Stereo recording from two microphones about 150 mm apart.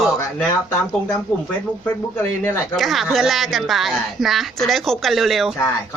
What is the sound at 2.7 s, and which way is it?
Speech, centre (ahead or behind).